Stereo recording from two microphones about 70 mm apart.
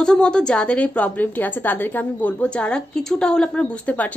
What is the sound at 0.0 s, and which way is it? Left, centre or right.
A woman's voice, centre.